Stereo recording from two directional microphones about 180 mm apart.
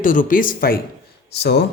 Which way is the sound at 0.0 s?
50° left (ahead or behind).